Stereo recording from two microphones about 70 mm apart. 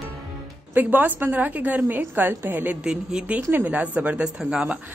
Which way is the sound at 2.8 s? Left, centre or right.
Centre.